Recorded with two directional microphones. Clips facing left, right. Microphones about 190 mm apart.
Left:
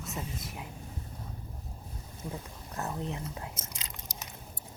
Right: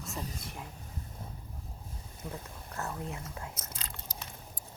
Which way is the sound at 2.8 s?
20° left (ahead or behind).